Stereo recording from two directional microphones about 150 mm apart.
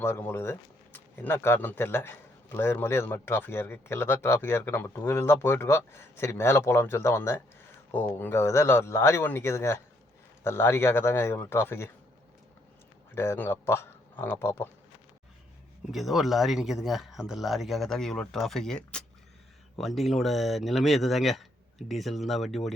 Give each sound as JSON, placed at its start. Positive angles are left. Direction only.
{"t": 0.0, "sound": "a man's voice", "side_deg": 15}
{"t": 13.1, "sound": "speech", "side_deg": 15}
{"t": 15.9, "sound": "speech", "side_deg": 0}